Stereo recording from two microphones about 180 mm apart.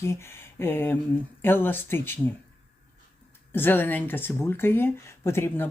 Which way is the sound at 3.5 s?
10° left (ahead or behind).